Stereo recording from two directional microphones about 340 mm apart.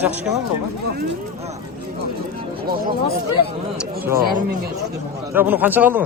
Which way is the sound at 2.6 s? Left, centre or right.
Right.